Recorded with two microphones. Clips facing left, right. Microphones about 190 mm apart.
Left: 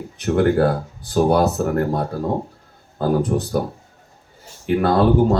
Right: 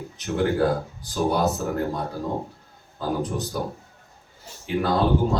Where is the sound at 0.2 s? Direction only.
60° left (ahead or behind).